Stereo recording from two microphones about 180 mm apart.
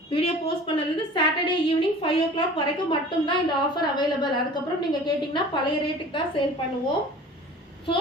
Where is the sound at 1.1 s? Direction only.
25° left (ahead or behind).